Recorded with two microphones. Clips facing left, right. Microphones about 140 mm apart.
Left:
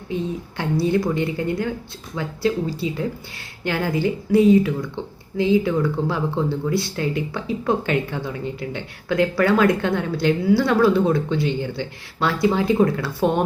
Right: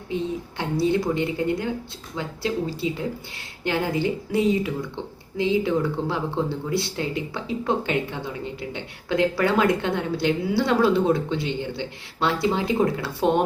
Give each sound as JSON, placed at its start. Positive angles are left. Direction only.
{"t": 0.1, "sound": "speech", "side_deg": -20}